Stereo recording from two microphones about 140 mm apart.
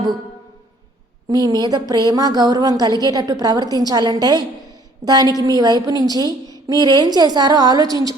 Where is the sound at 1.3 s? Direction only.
30° right (ahead or behind).